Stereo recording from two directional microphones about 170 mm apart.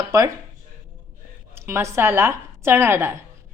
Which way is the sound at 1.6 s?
15° right (ahead or behind).